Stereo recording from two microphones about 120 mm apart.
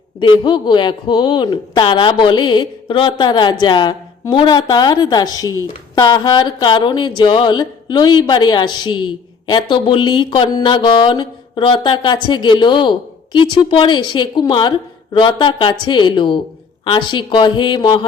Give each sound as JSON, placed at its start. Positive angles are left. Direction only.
{"t": 0.2, "sound": "speech", "side_deg": 40}